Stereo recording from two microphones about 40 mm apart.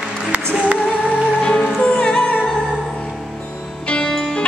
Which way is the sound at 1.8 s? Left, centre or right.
Left.